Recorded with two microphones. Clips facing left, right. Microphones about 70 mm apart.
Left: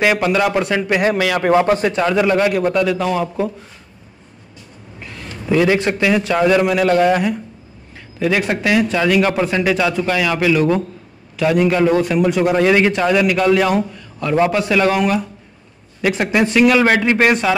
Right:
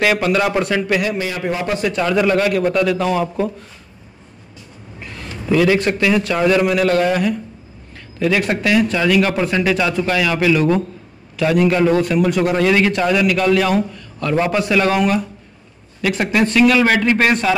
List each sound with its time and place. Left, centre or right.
0.0 s a man's voice: centre
1.1 s a man's voice: left
1.9 s a man's voice: left; by 3.5 s centre
5.0 s a sound: centre
5.5 s a man's voice: centre